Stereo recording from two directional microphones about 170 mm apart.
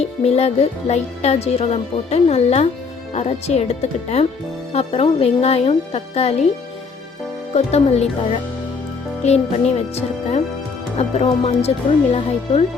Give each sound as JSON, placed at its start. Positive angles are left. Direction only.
{"t": 0.2, "sound": "speech", "side_deg": 40}
{"t": 7.5, "sound": "speech", "side_deg": 40}